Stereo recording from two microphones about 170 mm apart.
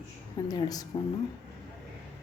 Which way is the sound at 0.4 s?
20° left (ahead or behind).